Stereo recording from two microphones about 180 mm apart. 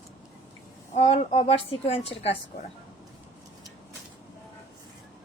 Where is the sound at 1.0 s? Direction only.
35° left (ahead or behind).